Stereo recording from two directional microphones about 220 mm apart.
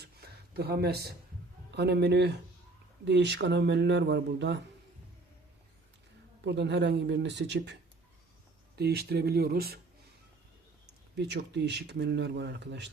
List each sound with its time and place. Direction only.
0.0 s a sound: 45° right (ahead or behind)
1.7 s speech: 50° right (ahead or behind)
6.4 s speech: 50° right (ahead or behind)
8.8 s speech: 45° right (ahead or behind)
11.2 s speech: 50° right (ahead or behind)